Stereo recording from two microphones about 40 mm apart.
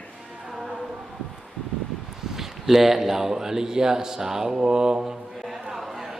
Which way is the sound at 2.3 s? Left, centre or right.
Centre.